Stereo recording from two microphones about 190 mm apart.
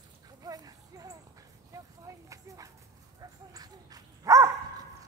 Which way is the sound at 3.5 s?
20° right (ahead or behind).